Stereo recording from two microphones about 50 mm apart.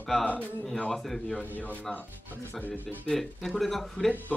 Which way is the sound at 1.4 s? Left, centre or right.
Left.